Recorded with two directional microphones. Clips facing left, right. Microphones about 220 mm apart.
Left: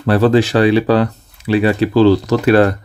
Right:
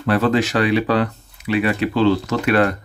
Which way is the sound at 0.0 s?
35° left (ahead or behind).